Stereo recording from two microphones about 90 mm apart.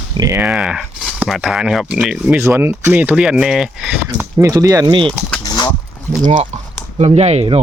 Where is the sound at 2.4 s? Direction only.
25° right (ahead or behind).